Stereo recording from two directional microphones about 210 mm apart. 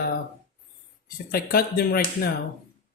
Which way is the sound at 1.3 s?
45° left (ahead or behind).